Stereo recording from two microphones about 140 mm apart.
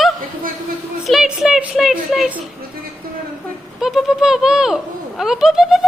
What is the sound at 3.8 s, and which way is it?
Speech, centre (ahead or behind).